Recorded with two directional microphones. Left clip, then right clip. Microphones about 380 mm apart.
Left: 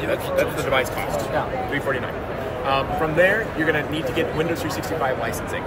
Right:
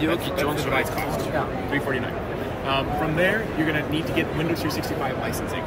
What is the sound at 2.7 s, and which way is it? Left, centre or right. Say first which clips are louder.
Speech: left 3 dB; centre.